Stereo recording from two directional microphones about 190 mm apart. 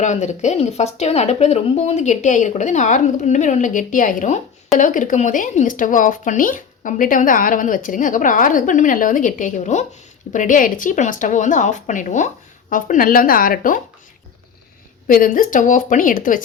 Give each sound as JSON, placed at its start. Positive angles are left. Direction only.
{"t": 0.0, "sound": "speech", "side_deg": 40}
{"t": 15.0, "sound": "speech", "side_deg": 45}